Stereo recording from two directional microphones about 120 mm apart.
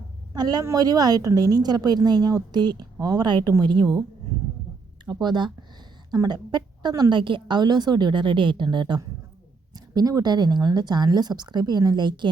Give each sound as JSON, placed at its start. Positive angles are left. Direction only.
{"t": 0.3, "sound": "a woman's voice", "side_deg": -35}
{"t": 5.0, "sound": "a woman's voice", "side_deg": -40}